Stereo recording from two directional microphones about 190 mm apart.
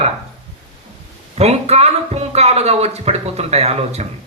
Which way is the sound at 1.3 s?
35° right (ahead or behind).